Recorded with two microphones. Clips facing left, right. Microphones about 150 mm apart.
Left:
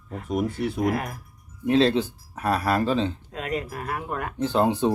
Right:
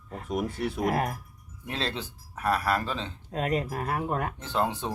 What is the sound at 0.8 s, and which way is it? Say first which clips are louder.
Speech: even; 40° right (ahead or behind).